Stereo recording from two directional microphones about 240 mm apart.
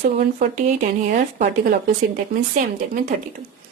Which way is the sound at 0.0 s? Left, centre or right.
Right.